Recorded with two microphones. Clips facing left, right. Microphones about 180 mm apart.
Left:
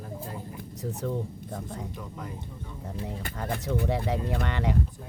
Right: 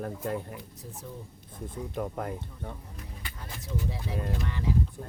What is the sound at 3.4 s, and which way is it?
Speech, 65° left (ahead or behind).